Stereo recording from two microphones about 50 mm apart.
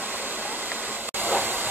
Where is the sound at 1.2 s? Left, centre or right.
Right.